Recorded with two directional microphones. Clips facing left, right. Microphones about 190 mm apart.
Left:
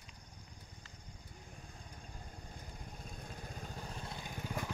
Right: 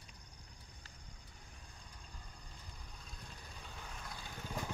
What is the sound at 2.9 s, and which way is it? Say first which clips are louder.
Vehicle: left 7 dB; 50° left (ahead or behind).